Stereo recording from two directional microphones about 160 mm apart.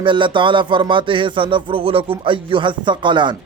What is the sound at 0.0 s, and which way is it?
Speech, 30° right (ahead or behind).